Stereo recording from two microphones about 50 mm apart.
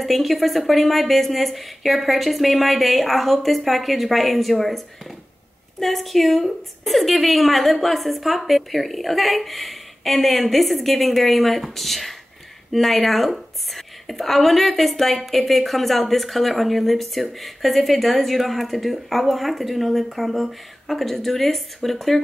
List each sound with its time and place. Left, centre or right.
0.0 s a woman's voice: centre